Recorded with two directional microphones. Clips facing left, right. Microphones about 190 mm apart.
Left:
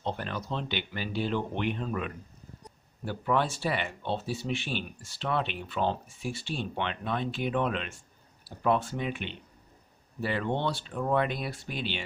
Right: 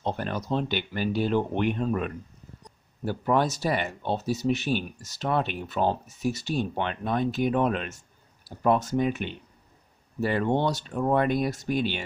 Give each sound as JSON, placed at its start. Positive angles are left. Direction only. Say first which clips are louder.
{"t": 0.0, "sound": "speech", "louder": "right 4 dB", "side_deg": -45}